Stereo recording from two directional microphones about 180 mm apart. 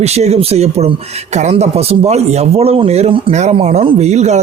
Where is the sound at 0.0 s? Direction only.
35° right (ahead or behind).